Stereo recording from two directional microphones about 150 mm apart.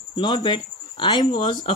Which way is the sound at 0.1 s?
30° left (ahead or behind).